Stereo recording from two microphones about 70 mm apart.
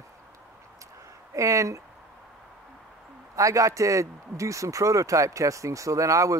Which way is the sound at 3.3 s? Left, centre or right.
Right.